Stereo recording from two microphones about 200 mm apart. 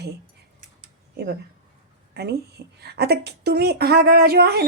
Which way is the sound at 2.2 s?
55° right (ahead or behind).